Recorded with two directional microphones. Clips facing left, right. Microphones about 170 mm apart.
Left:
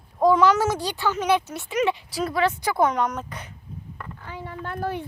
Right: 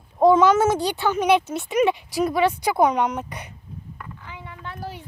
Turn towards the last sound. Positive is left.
turn(degrees=55)  # may be behind; listen again after turning